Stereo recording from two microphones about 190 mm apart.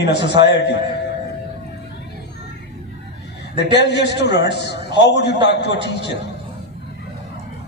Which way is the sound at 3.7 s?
60° left (ahead or behind).